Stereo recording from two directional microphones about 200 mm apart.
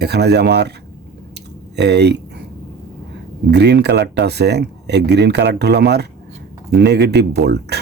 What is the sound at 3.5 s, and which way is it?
Speech, 55° right (ahead or behind).